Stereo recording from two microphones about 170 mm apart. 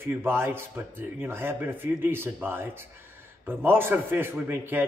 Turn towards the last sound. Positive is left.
turn(degrees=-15)  # may be behind; listen again after turning